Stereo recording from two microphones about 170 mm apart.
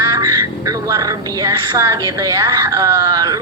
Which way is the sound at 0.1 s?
20° right (ahead or behind).